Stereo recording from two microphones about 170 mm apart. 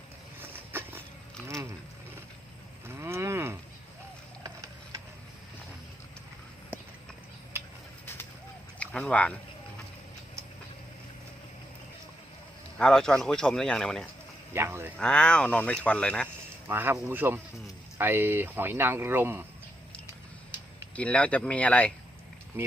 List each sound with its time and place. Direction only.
0.4 s a sound: 10° right (ahead or behind)
2.9 s cattle: 15° right (ahead or behind)
8.8 s speech: 5° left (ahead or behind)
12.8 s speech: 5° left (ahead or behind)
14.5 s speech: 15° right (ahead or behind)
14.9 s speech: 5° left (ahead or behind)
16.6 s speech: 15° right (ahead or behind)
20.9 s speech: 5° left (ahead or behind)
22.5 s speech: 10° right (ahead or behind)